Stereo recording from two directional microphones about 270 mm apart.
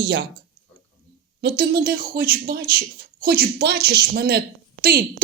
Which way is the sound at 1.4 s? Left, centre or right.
Right.